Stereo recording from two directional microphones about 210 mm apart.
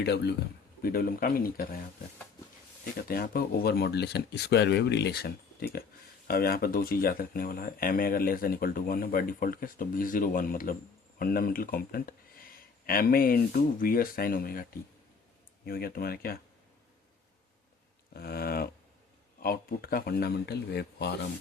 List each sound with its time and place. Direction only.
0.0 s speech: 50° left (ahead or behind)
3.1 s speech: 45° left (ahead or behind)
18.1 s speech: 45° left (ahead or behind)